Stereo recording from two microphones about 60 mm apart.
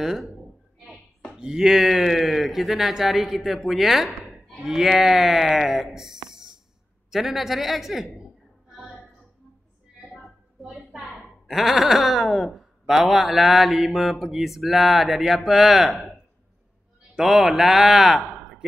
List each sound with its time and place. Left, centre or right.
0.0 s speech: centre
1.3 s speech: centre
10.1 s a sound: centre
11.2 s a man's voice: centre